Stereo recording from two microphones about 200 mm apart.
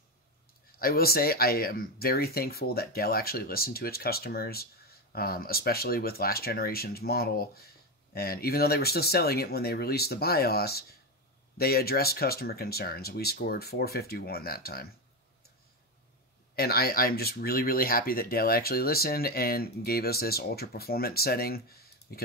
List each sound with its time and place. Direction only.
0.7 s speech: 50° left (ahead or behind)
16.5 s speech: 50° left (ahead or behind)